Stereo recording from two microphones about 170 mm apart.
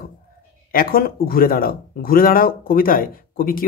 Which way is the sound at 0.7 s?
60° left (ahead or behind).